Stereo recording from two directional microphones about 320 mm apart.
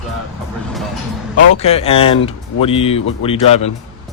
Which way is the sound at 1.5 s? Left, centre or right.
Centre.